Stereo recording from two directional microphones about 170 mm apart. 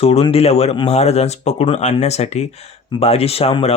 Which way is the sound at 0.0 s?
35° left (ahead or behind).